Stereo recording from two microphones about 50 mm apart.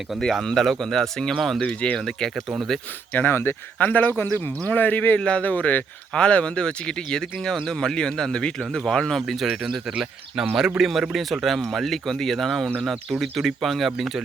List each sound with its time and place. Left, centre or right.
0.4 s speech: centre
1.6 s speech: left
3.1 s speech: left; by 9.2 s centre
9.2 s speech: centre